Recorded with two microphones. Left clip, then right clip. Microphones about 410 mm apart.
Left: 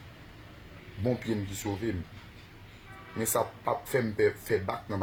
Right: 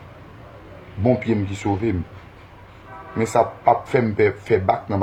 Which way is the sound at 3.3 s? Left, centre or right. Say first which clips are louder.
Right 13 dB; left.